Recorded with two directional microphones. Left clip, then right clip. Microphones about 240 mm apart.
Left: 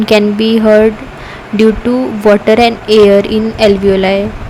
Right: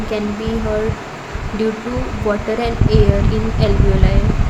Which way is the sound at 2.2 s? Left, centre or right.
Left.